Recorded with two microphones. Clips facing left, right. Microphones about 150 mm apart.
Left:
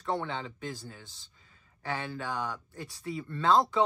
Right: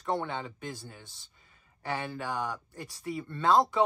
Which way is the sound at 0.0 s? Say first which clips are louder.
Right 1 dB; 15° right (ahead or behind).